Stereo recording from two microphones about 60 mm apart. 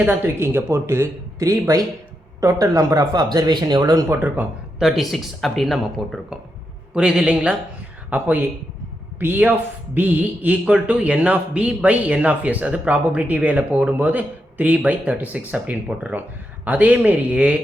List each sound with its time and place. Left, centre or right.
0.1 s speech: right
1.4 s speech: right
4.8 s a man's voice: centre
6.9 s a man's voice: centre
8.1 s a man's voice: right
16.6 s a man's voice: right